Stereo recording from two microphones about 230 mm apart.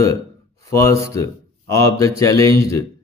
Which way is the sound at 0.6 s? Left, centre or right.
Centre.